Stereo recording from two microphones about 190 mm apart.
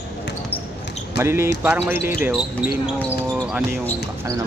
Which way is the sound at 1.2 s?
15° right (ahead or behind).